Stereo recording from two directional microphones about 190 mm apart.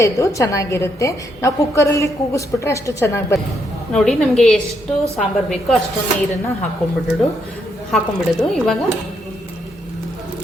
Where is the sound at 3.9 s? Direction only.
5° left (ahead or behind).